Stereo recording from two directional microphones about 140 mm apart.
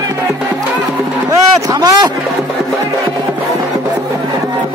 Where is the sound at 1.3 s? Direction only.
25° right (ahead or behind).